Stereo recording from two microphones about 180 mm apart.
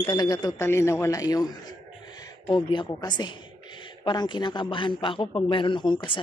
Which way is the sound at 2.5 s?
25° left (ahead or behind).